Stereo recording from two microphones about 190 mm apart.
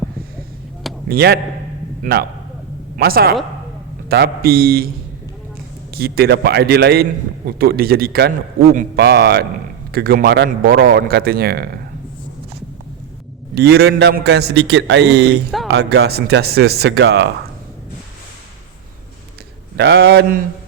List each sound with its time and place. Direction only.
1.0 s a man's voice: 55° right (ahead or behind)
3.0 s a man's voice: 55° right (ahead or behind)
5.9 s a man's voice: 55° right (ahead or behind)
9.0 s a man's voice: 55° right (ahead or behind)
13.6 s a man's voice: 60° right (ahead or behind)
19.7 s a man's voice: 60° right (ahead or behind)